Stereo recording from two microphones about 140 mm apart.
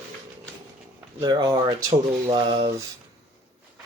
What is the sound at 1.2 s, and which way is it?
Speech, 30° right (ahead or behind).